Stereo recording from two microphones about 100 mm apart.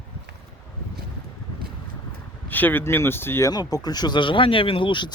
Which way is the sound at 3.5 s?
40° left (ahead or behind).